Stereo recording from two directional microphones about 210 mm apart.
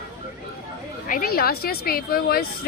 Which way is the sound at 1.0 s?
45° left (ahead or behind).